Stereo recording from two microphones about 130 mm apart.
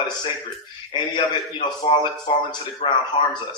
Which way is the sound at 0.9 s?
35° left (ahead or behind).